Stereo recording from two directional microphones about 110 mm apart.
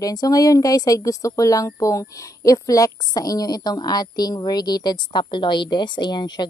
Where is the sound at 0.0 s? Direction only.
35° left (ahead or behind).